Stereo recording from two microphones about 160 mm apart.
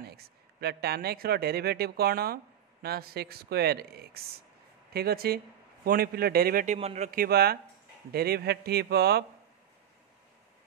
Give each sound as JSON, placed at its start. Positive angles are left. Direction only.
{"t": 0.0, "sound": "a man's voice", "side_deg": -80}
{"t": 7.1, "sound": "speech", "side_deg": -70}